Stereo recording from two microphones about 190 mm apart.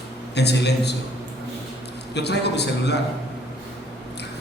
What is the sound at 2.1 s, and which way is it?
Speech, 60° left (ahead or behind).